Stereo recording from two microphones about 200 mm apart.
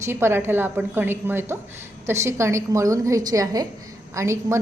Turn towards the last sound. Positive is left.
turn(degrees=-15)  # may be behind; listen again after turning